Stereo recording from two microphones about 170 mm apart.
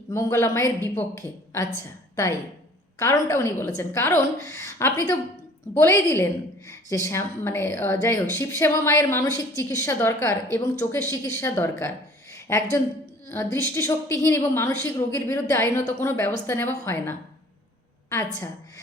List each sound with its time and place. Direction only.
0.1 s a woman's voice: 15° left (ahead or behind)